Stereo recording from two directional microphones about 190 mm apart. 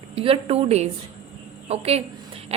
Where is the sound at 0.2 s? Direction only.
30° right (ahead or behind).